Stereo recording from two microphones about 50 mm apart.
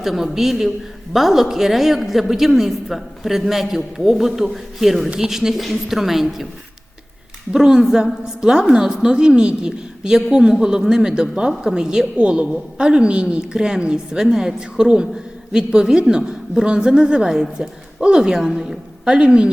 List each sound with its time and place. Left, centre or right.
0.0 s a woman's voice: centre
7.5 s a woman's voice: centre
19.1 s a woman's voice: centre